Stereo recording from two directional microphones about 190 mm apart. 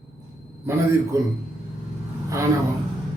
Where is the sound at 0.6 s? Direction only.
15° right (ahead or behind).